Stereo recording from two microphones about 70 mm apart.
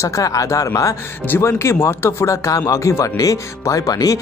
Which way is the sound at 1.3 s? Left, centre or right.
Left.